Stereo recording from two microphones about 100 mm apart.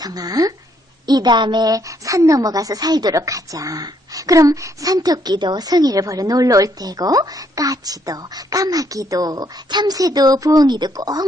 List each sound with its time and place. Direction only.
0.0 s a woman's voice: 40° right (ahead or behind)